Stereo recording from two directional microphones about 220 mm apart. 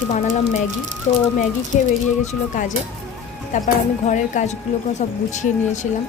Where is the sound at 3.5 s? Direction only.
35° left (ahead or behind).